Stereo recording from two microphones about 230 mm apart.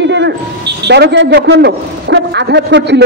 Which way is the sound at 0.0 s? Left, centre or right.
Right.